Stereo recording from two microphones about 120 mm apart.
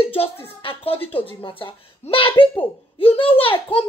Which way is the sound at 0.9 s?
15° left (ahead or behind).